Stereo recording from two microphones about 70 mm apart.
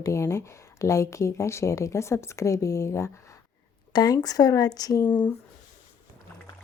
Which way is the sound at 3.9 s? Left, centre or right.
Left.